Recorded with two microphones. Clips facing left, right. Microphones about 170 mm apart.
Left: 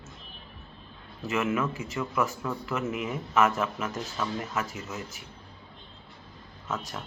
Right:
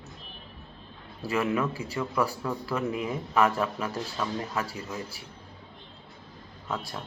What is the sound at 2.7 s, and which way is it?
Speech, 15° right (ahead or behind).